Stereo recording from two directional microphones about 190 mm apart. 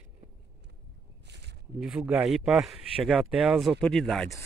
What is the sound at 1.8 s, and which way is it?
Speech, 5° right (ahead or behind).